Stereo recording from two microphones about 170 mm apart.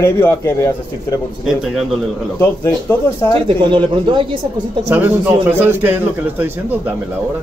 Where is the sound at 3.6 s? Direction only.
30° right (ahead or behind).